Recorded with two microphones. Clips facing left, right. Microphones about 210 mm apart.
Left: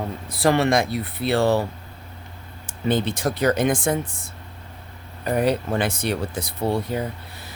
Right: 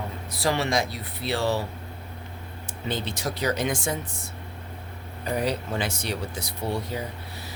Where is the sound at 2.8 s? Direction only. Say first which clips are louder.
Left 8 dB; 55° left (ahead or behind).